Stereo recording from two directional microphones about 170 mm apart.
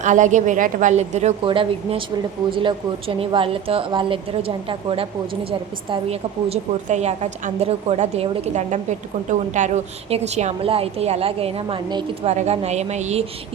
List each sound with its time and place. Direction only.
0.0 s a woman's voice: 45° right (ahead or behind)
1.5 s a woman's voice: 30° right (ahead or behind)